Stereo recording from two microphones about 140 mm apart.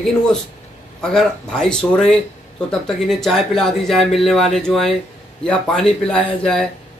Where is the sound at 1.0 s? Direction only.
5° left (ahead or behind).